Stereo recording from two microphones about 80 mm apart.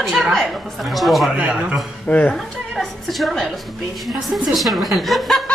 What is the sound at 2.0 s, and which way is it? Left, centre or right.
Speech, left.